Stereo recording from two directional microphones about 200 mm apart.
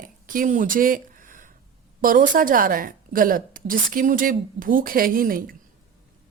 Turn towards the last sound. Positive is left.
turn(degrees=-45)  # may be behind; listen again after turning